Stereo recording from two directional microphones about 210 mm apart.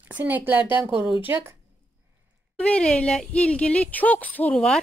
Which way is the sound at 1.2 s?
10° right (ahead or behind).